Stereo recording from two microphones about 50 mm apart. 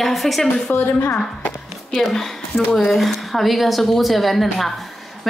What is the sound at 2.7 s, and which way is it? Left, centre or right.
Speech, centre.